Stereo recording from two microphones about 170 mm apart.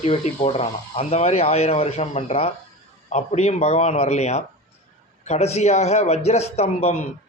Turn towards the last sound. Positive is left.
turn(degrees=40)  # may be behind; listen again after turning